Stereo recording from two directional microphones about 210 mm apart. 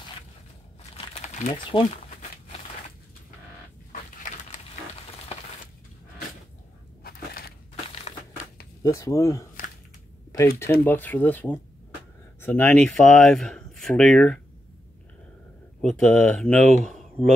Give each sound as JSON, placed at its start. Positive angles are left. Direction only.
{"t": 0.9, "sound": "crumpling", "side_deg": 30}
{"t": 7.0, "sound": "a sound", "side_deg": 45}
{"t": 8.8, "sound": "speech", "side_deg": 15}
{"t": 10.7, "sound": "speech", "side_deg": 10}
{"t": 15.8, "sound": "speech", "side_deg": 0}
{"t": 16.8, "sound": "a sound", "side_deg": 0}